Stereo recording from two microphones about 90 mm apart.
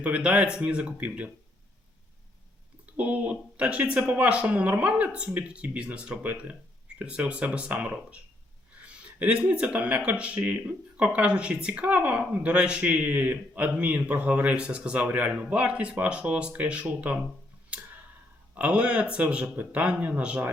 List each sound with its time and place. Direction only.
0.0 s speech: 15° right (ahead or behind)
3.0 s speech: 15° right (ahead or behind)
18.5 s speech: 15° right (ahead or behind)